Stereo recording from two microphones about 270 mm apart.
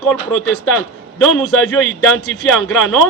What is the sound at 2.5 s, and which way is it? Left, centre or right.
Speech, centre.